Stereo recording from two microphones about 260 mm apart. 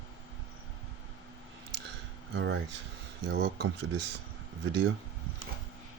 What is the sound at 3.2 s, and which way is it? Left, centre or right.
Speech, right.